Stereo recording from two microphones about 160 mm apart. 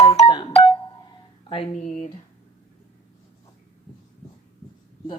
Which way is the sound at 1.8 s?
50° left (ahead or behind).